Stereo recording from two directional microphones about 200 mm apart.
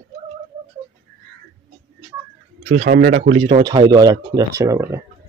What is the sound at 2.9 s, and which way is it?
Speech, 45° right (ahead or behind).